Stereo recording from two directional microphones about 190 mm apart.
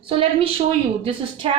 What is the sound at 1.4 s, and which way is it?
Speech, 30° right (ahead or behind).